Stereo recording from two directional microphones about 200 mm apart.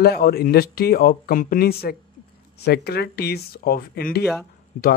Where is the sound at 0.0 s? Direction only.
50° left (ahead or behind).